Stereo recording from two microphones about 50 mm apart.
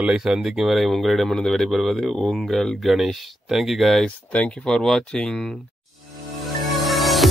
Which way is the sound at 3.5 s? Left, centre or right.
Centre.